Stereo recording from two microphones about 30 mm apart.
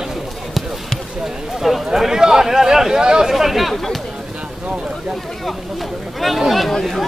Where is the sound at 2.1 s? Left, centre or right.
Right.